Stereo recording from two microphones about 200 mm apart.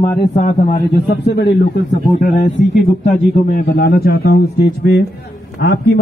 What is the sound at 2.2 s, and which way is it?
Speech, 40° left (ahead or behind).